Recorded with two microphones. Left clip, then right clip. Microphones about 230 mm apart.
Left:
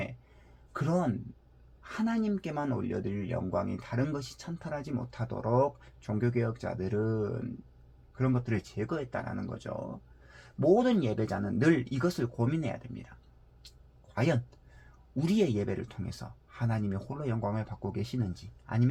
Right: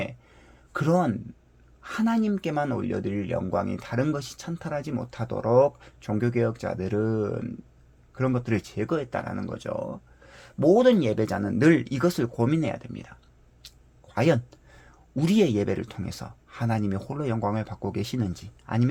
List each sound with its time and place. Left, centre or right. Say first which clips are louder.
0.7 s speech: right 7 dB; right
13.6 s a sound: right 7 dB; right
15.1 s speech: right 6 dB; right